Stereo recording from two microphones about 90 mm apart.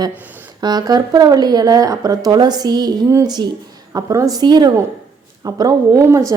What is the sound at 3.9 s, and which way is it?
Speech, 40° right (ahead or behind).